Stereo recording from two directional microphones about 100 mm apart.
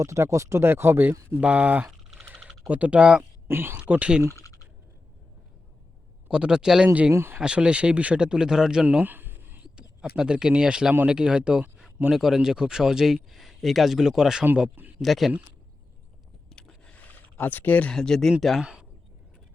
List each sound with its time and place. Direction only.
0.0 s speech: 30° right (ahead or behind)
1.4 s speech: 10° right (ahead or behind)
3.5 s speech: 25° right (ahead or behind)
4.4 s clicking: 30° left (ahead or behind)
6.2 s speech: 10° right (ahead or behind)
7.1 s speech: 25° right (ahead or behind)
7.3 s speech: 10° right (ahead or behind)
9.7 s speech: 5° right (ahead or behind)
14.8 s a sound: 15° right (ahead or behind)
15.0 s speech: centre (ahead or behind)
16.5 s a sound: 5° left (ahead or behind)
18.6 s speech: 10° right (ahead or behind)